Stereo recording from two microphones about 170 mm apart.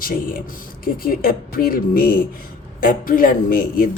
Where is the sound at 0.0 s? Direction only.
55° left (ahead or behind).